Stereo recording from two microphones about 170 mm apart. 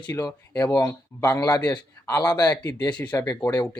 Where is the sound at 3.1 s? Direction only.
20° left (ahead or behind).